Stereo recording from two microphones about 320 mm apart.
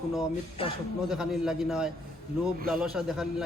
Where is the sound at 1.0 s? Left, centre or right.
Centre.